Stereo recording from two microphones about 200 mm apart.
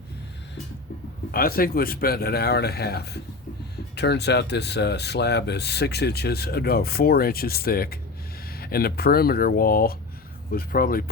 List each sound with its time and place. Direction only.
1.3 s a man's voice: 45° left (ahead or behind)